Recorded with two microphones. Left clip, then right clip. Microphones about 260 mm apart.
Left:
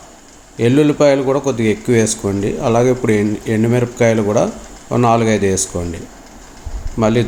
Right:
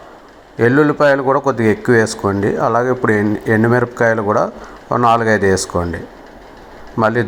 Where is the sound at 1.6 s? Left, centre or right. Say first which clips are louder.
Right 2 dB; right.